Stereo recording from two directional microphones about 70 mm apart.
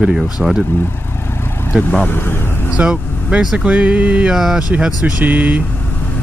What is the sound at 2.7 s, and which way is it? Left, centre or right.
Speech, centre.